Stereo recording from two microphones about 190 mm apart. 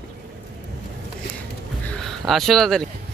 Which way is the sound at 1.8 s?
5° left (ahead or behind).